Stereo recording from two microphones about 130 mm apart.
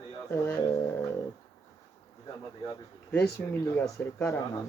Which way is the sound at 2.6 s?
15° left (ahead or behind).